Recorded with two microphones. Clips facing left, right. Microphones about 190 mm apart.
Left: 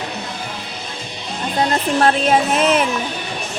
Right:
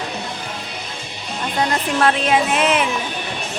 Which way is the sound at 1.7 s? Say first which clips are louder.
Left 2 dB; 35° left (ahead or behind).